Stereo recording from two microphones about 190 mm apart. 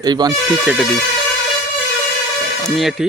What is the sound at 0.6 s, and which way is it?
Speech, 5° right (ahead or behind).